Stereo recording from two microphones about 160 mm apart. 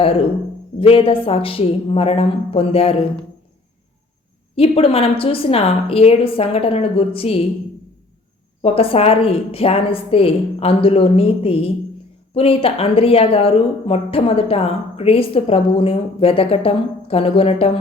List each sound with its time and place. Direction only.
0.0 s speech: 35° left (ahead or behind)
4.5 s speech: 35° left (ahead or behind)
8.6 s speech: 35° left (ahead or behind)